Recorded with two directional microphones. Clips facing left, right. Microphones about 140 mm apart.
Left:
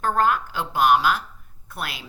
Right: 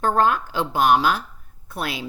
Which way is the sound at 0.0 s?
30° right (ahead or behind).